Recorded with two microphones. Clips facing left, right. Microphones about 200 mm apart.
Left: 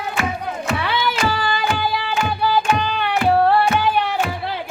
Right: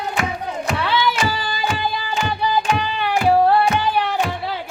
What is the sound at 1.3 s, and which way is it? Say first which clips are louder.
Music: left 2 dB; 60° left (ahead or behind).